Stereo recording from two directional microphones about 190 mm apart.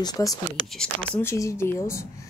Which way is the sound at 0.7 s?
5° left (ahead or behind).